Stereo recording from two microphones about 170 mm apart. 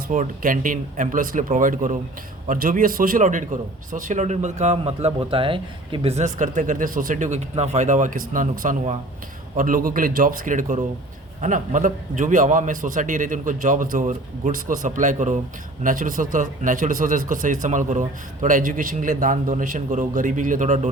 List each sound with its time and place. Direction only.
0.1 s speech: 50° right (ahead or behind)